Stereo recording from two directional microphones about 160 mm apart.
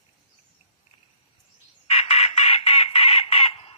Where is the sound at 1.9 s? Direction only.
40° left (ahead or behind).